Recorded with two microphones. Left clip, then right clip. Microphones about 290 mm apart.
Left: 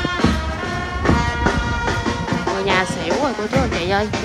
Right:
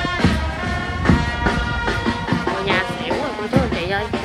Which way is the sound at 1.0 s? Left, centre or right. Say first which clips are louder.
Left 2 dB; left.